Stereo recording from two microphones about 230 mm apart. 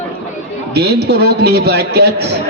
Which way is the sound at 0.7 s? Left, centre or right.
Right.